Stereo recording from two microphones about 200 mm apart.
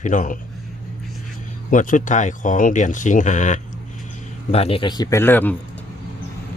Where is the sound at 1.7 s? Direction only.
40° left (ahead or behind); by 5.5 s 10° left (ahead or behind).